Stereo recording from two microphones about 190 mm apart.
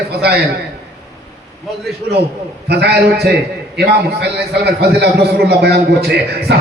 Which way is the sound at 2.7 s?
60° right (ahead or behind).